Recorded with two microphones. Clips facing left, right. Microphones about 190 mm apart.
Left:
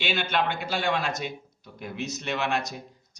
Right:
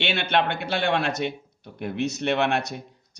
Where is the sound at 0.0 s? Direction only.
65° right (ahead or behind).